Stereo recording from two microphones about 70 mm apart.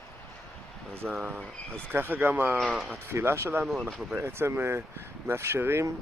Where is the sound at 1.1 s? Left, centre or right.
Right.